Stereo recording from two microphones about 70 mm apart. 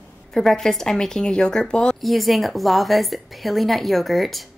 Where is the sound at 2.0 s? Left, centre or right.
Centre.